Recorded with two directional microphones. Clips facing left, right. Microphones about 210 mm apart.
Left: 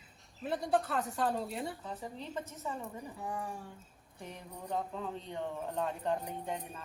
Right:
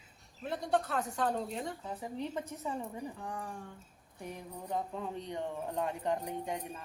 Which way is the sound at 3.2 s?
5° left (ahead or behind).